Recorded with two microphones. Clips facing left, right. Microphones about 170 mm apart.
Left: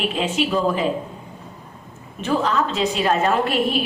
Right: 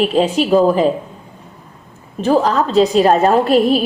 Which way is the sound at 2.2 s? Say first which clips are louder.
Right 7 dB; 40° right (ahead or behind).